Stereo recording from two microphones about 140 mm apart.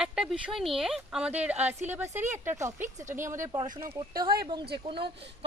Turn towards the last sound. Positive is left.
turn(degrees=-40)  # may be behind; listen again after turning